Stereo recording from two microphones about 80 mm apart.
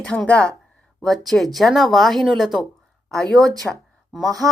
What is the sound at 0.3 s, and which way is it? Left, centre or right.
Speech, centre.